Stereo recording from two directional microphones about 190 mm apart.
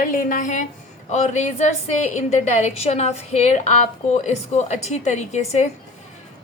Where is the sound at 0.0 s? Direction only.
45° left (ahead or behind).